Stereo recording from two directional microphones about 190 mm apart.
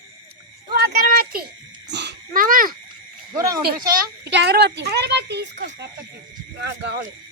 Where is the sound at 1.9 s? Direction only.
65° right (ahead or behind).